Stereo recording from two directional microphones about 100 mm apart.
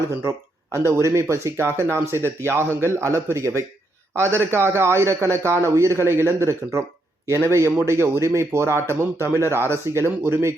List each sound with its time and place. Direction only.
0.2 s speech: 25° right (ahead or behind)